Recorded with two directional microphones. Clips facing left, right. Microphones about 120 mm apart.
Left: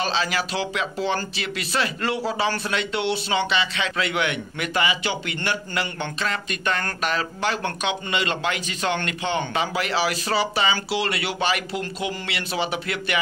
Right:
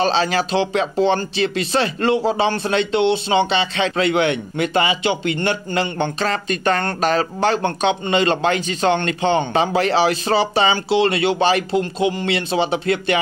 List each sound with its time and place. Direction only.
0.0 s speech: 30° right (ahead or behind)